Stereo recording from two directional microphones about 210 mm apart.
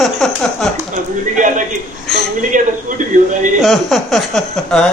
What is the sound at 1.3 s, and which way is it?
A man's voice, 35° right (ahead or behind).